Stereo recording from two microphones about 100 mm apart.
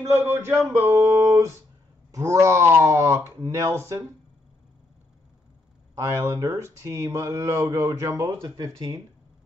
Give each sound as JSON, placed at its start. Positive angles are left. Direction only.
{"t": 0.3, "sound": "speech", "side_deg": -25}
{"t": 5.9, "sound": "speech", "side_deg": -30}
{"t": 8.2, "sound": "speech", "side_deg": -45}
{"t": 8.5, "sound": "speech", "side_deg": -35}